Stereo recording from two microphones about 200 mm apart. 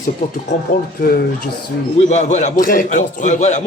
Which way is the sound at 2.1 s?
35° left (ahead or behind).